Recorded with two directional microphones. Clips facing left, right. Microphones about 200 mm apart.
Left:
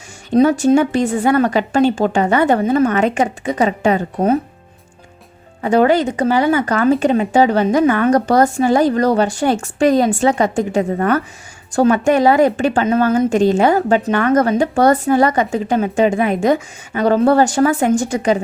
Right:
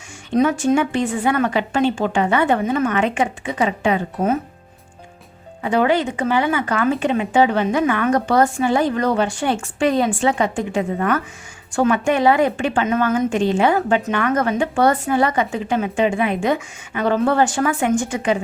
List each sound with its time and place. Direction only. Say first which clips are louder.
0.3 s a woman's voice: left 5 dB; 35° left (ahead or behind)
5.6 s a woman's voice: left 4 dB; 45° left (ahead or behind)